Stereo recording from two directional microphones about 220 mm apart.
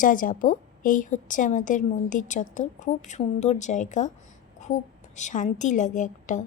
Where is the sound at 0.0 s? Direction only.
40° left (ahead or behind).